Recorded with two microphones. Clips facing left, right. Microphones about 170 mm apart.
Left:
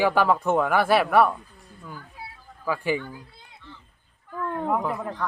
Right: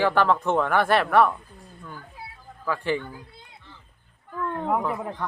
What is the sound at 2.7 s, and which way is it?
Speech, 10° left (ahead or behind).